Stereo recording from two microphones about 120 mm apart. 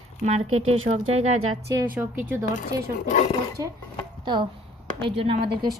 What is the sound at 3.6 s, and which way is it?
Speech, 25° right (ahead or behind).